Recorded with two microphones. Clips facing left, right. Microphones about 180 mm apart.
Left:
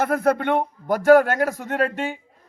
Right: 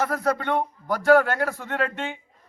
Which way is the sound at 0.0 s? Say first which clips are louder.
Left 4 dB; 55° left (ahead or behind).